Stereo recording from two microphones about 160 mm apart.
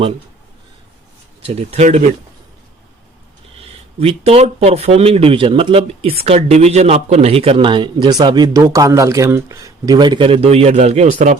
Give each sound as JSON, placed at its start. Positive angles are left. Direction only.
{"t": 1.5, "sound": "speech", "side_deg": -40}
{"t": 3.6, "sound": "speech", "side_deg": -40}